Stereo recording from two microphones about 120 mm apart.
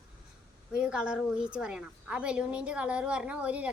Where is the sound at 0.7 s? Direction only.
10° right (ahead or behind).